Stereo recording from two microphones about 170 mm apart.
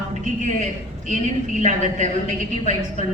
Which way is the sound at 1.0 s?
40° left (ahead or behind).